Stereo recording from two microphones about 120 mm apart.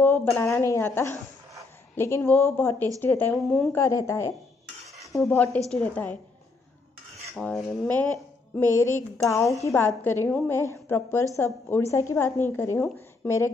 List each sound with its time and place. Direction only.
0.0 s a woman's voice: 15° left (ahead or behind)
3.4 s speech: 5° left (ahead or behind)
3.7 s a woman's voice: 25° left (ahead or behind)
7.3 s speech: 5° left (ahead or behind)
8.5 s a woman's voice: 20° left (ahead or behind)